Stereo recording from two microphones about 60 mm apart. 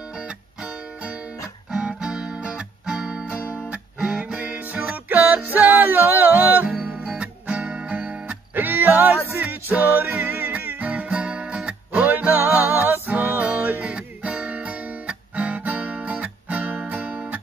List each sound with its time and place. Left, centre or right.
0.6 s music: centre
8.5 s music: right
12.1 s music: right